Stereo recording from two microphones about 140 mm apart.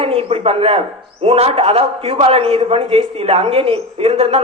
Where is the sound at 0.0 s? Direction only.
40° right (ahead or behind).